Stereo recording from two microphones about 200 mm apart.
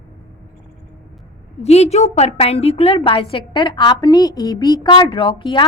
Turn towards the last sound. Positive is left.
turn(degrees=25)  # may be behind; listen again after turning